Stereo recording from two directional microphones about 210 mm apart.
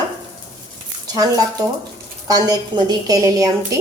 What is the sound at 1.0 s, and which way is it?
A woman's voice, 15° right (ahead or behind).